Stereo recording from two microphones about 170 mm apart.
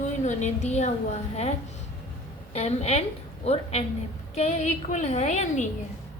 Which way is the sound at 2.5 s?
40° left (ahead or behind).